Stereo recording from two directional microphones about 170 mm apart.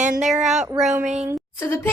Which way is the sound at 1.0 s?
45° right (ahead or behind).